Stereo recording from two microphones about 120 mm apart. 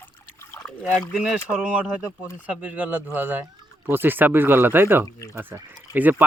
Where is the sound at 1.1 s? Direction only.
5° right (ahead or behind).